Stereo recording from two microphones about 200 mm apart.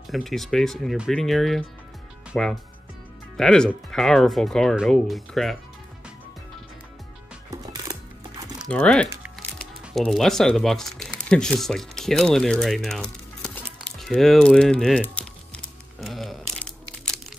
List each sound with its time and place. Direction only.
0.0 s speech: centre (ahead or behind)
7.5 s music: 15° right (ahead or behind)
8.6 s speech: 5° left (ahead or behind)
13.9 s music: centre (ahead or behind)